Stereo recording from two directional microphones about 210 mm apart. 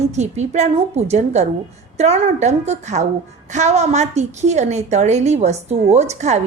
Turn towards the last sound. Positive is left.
turn(degrees=-30)  # may be behind; listen again after turning